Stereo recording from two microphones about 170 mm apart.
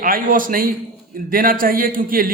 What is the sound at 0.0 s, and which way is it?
A man's voice, 55° right (ahead or behind).